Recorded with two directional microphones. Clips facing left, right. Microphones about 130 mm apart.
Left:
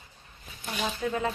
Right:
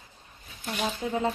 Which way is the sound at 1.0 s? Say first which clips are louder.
Right 1 dB; 25° right (ahead or behind).